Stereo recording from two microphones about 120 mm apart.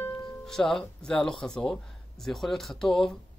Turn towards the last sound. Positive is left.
turn(degrees=5)  # may be behind; listen again after turning